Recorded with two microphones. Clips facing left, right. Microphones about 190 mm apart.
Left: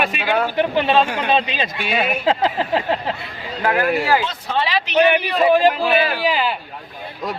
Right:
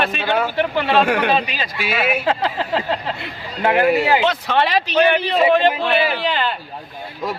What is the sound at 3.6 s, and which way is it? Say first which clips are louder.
Speech: right 3 dB; 20° right (ahead or behind).